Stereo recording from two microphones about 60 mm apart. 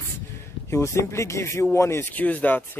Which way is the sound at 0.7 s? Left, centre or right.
Left.